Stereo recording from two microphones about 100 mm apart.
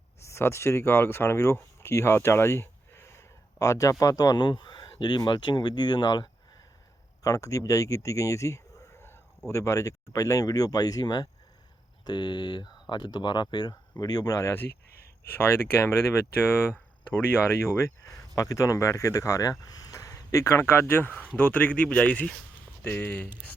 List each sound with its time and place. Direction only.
0.2 s speech: 25° left (ahead or behind); by 6.3 s 50° left (ahead or behind)
7.2 s speech: 35° left (ahead or behind)
15.7 s speech: 25° left (ahead or behind)